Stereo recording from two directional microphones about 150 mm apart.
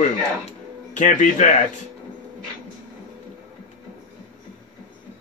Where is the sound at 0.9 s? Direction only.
55° left (ahead or behind).